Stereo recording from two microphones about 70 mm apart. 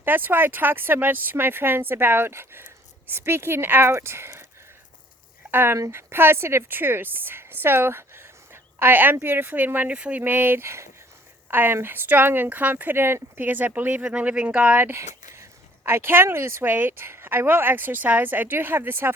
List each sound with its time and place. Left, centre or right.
0.0 s speech: right
5.5 s speech: right; by 14.8 s centre
14.8 s speech: right